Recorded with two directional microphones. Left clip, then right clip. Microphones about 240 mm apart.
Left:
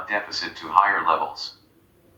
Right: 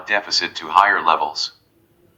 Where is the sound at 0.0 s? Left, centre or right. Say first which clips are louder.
Right 7 dB; right.